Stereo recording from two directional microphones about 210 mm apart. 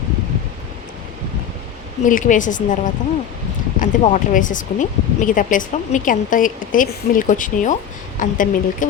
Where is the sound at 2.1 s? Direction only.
40° left (ahead or behind).